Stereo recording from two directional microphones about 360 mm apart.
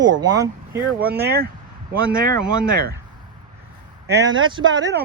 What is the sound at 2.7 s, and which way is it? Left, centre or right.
Speech, right.